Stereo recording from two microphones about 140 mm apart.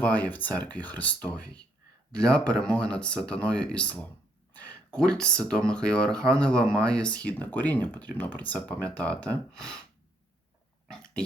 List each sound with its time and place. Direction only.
0.0 s speech: 10° left (ahead or behind)
2.1 s a man's voice: 5° left (ahead or behind)
10.8 s dog: 5° left (ahead or behind)